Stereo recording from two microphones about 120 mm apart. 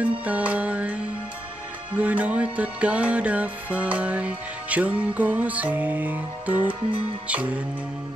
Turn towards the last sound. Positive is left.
turn(degrees=-10)  # may be behind; listen again after turning